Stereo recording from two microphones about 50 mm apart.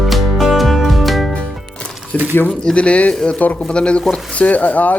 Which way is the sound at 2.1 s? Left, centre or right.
Left.